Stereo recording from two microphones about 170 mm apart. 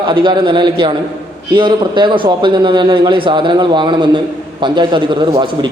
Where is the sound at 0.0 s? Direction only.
30° right (ahead or behind).